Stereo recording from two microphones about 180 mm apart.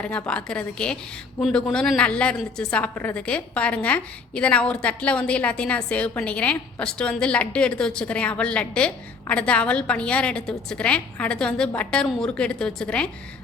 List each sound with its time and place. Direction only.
0.0 s a woman's voice: 5° left (ahead or behind)